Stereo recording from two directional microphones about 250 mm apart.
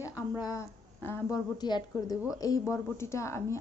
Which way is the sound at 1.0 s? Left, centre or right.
Centre.